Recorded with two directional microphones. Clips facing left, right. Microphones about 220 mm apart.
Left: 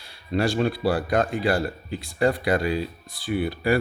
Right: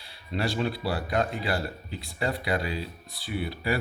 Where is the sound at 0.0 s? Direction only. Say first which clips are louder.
Left 6 dB; 50° left (ahead or behind).